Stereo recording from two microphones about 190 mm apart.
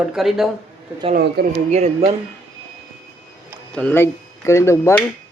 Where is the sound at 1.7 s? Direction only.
35° right (ahead or behind).